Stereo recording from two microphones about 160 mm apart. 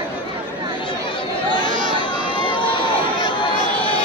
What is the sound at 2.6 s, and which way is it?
Run, 30° left (ahead or behind).